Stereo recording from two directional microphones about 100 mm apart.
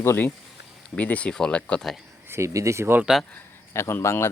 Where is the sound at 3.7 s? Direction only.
25° left (ahead or behind).